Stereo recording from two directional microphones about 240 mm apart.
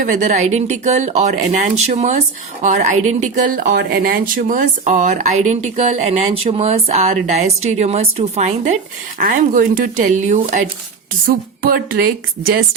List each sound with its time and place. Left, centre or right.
0.0 s a woman's voice: right